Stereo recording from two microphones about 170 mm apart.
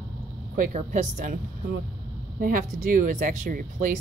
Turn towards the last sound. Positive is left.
turn(degrees=-55)  # may be behind; listen again after turning